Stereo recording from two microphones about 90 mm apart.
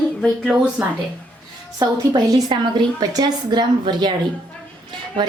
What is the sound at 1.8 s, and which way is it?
A woman's voice, 55° right (ahead or behind).